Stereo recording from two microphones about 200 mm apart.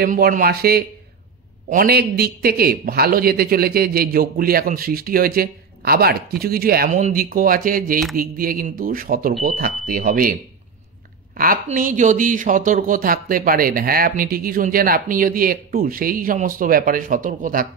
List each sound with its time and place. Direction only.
0.0 s a man's voice: 45° right (ahead or behind)
11.3 s a man's voice: 45° right (ahead or behind)